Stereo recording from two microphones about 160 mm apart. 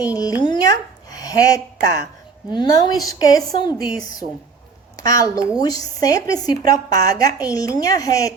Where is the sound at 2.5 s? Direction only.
25° left (ahead or behind).